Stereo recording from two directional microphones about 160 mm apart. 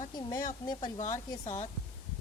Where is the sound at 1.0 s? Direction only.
50° left (ahead or behind).